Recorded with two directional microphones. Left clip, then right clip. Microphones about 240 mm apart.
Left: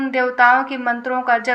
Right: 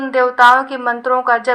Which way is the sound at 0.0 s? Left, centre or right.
Centre.